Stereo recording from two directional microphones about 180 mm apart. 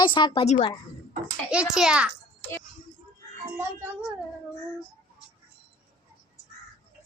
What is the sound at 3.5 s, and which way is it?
Speech, 10° right (ahead or behind).